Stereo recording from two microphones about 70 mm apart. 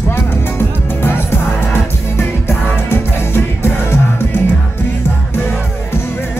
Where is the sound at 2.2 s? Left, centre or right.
Left.